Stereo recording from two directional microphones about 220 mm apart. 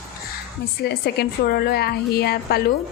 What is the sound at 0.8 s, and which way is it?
A woman's voice, 45° left (ahead or behind).